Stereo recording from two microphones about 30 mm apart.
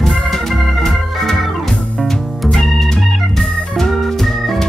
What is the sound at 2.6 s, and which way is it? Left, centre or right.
Organ, centre.